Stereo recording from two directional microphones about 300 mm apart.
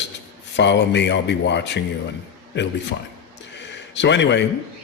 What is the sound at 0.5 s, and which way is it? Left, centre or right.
Speech, left.